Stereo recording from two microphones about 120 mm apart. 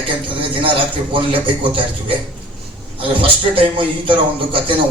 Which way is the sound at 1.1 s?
50° right (ahead or behind).